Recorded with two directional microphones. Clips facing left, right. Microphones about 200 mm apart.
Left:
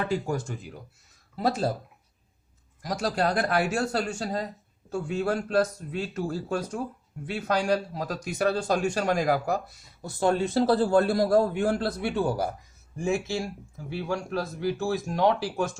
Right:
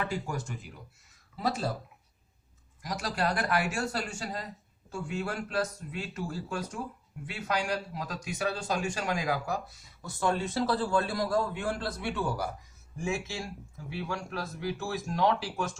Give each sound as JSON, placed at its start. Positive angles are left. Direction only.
{"t": 0.0, "sound": "a man's voice", "side_deg": 30}
{"t": 2.8, "sound": "speech", "side_deg": 50}
{"t": 3.8, "sound": "a man's voice", "side_deg": 35}